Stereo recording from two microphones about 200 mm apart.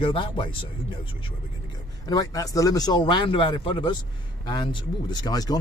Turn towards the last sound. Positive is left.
turn(degrees=20)  # may be behind; listen again after turning